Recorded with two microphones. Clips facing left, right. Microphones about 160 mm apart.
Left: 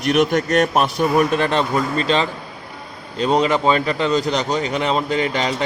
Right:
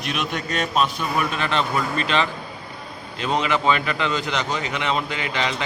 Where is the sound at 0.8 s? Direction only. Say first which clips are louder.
Left 8 dB; 40° left (ahead or behind).